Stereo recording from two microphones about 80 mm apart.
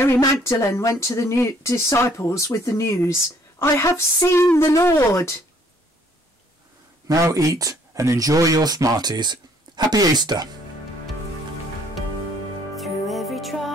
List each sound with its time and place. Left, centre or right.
0.4 s speech: left
7.1 s speech: right
12.7 s music: centre